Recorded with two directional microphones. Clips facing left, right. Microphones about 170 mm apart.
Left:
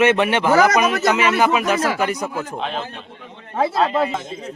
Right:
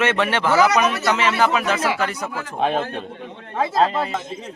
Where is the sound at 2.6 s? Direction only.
50° right (ahead or behind).